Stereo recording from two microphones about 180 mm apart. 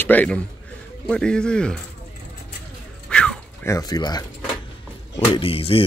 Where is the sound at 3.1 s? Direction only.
5° left (ahead or behind).